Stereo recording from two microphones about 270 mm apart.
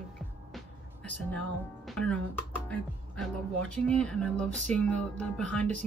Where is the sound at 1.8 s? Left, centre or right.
Centre.